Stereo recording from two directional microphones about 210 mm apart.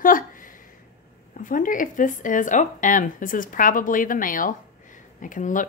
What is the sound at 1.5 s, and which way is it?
A woman's voice, 40° left (ahead or behind).